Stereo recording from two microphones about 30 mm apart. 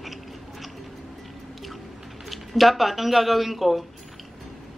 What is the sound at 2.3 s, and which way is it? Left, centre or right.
Speech, centre.